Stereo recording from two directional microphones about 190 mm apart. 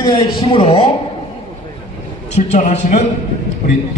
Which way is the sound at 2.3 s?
35° left (ahead or behind).